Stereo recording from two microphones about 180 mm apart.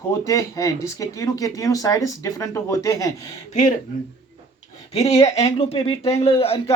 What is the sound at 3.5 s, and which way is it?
Speech, 45° left (ahead or behind).